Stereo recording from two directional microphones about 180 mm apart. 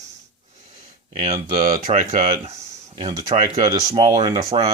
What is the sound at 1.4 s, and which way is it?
Speech, 50° right (ahead or behind).